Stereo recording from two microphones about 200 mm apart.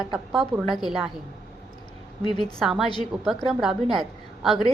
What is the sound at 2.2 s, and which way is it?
Speech, 25° left (ahead or behind).